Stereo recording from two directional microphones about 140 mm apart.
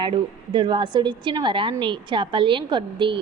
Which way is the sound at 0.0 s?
35° right (ahead or behind).